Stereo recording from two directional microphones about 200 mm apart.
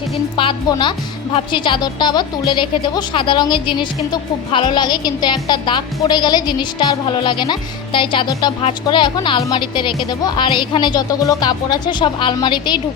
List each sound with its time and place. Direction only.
0.3 s speech: 25° left (ahead or behind)